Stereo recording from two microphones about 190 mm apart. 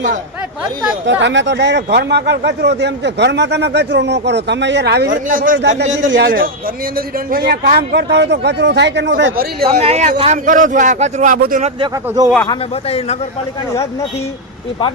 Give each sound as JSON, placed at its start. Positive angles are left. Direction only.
{"t": 1.0, "sound": "speech", "side_deg": -70}
{"t": 5.1, "sound": "speech", "side_deg": -45}
{"t": 6.1, "sound": "speech", "side_deg": -75}
{"t": 6.9, "sound": "speech", "side_deg": -50}
{"t": 9.6, "sound": "speech", "side_deg": -35}
{"t": 11.8, "sound": "speech", "side_deg": -20}
{"t": 12.5, "sound": "a man's voice", "side_deg": 35}